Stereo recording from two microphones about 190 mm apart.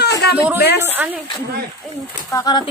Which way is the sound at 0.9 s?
10° right (ahead or behind).